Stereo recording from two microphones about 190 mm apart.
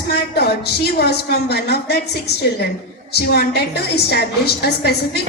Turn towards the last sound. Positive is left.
turn(degrees=60)  # may be behind; listen again after turning